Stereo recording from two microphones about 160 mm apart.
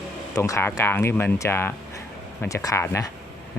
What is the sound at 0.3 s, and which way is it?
Speech, 20° left (ahead or behind).